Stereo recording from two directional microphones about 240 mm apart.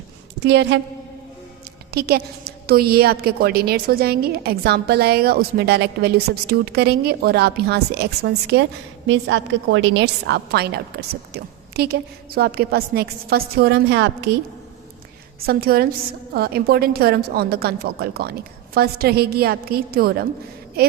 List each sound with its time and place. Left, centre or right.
0.3 s a woman's voice: right
1.9 s a woman's voice: right
11.7 s a woman's voice: right
15.4 s a woman's voice: right